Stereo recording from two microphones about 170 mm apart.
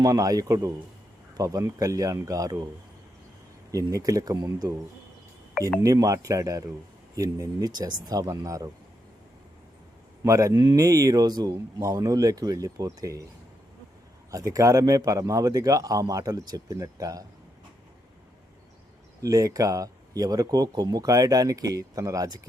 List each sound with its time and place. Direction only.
0.0 s speech: 20° right (ahead or behind)
3.7 s speech: 20° right (ahead or behind)
5.8 s speech: 20° right (ahead or behind)
10.2 s speech: 20° right (ahead or behind)
14.3 s speech: 20° right (ahead or behind)
19.2 s speech: 20° right (ahead or behind)